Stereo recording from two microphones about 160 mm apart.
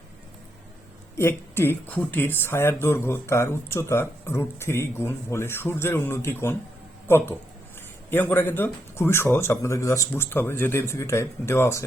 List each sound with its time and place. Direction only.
1.2 s speech: 15° left (ahead or behind)
8.1 s speech: 10° left (ahead or behind)